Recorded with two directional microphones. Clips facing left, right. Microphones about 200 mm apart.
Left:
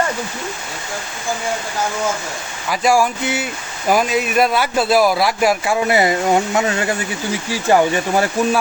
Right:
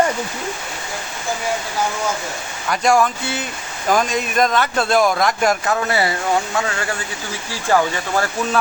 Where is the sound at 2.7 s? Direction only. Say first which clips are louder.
Left 1 dB; 5° left (ahead or behind).